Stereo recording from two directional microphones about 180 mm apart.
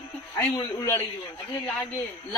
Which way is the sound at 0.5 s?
15° left (ahead or behind).